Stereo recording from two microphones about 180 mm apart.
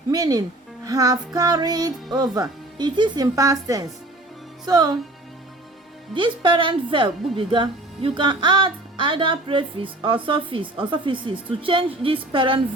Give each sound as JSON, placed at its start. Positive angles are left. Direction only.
{"t": 0.1, "sound": "speech", "side_deg": -20}
{"t": 6.1, "sound": "speech", "side_deg": -25}